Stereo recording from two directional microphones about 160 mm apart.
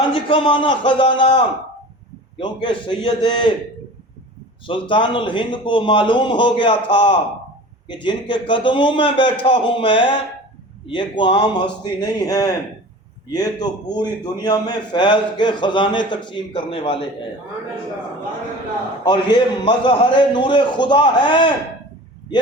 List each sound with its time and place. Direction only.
0.1 s a man's voice: 35° left (ahead or behind)
4.6 s a man's voice: 30° left (ahead or behind)
19.0 s a man's voice: 30° left (ahead or behind)